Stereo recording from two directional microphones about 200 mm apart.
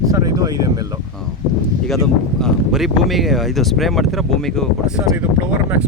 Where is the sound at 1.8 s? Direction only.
Centre (ahead or behind).